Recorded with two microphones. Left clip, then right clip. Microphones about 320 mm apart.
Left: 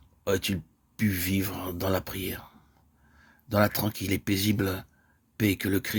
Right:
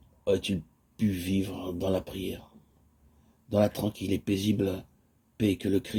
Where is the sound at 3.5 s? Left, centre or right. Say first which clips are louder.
Left 1 dB; left.